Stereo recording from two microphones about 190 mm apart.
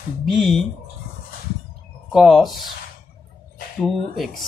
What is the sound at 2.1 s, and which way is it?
Speech, centre (ahead or behind).